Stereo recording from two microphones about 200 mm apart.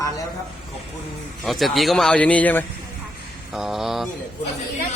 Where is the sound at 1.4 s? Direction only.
Centre (ahead or behind).